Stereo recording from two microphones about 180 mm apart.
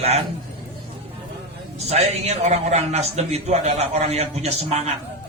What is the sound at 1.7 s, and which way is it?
A man's voice, 35° right (ahead or behind).